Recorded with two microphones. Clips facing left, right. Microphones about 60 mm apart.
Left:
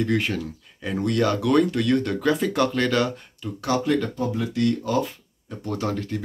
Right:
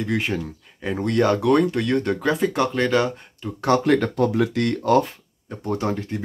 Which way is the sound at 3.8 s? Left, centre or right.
Right.